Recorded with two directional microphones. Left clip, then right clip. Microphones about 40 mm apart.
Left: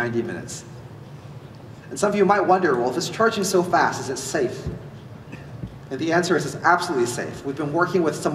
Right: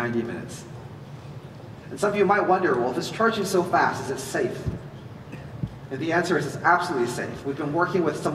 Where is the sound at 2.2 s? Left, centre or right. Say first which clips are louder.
Left 3 dB; left.